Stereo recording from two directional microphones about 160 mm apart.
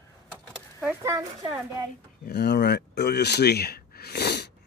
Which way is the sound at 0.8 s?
20° right (ahead or behind).